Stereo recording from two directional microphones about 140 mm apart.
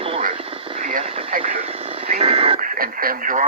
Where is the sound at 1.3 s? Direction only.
75° right (ahead or behind).